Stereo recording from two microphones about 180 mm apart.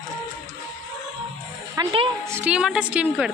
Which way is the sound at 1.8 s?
20° right (ahead or behind).